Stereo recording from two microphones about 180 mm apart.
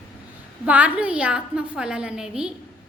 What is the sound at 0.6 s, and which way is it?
A woman's voice, 10° right (ahead or behind).